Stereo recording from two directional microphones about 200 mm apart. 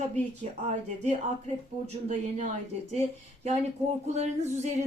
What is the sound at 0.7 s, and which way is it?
A woman's voice, 35° right (ahead or behind).